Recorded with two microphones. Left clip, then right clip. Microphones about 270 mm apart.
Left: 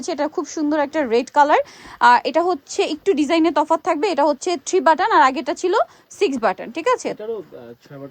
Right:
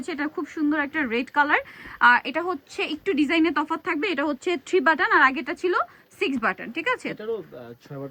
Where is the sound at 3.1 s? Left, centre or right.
Left.